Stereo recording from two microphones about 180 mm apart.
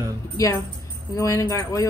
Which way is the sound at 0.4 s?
20° left (ahead or behind).